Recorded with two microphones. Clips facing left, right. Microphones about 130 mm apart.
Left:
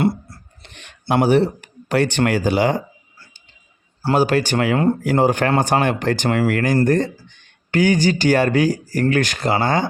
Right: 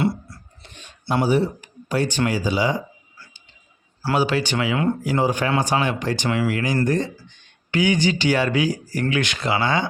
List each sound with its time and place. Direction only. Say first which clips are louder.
0.6 s speech: left 3 dB; 70° left (ahead or behind)
4.1 s speech: left 4 dB; 45° left (ahead or behind)
5.0 s speech: left 4 dB; 55° left (ahead or behind)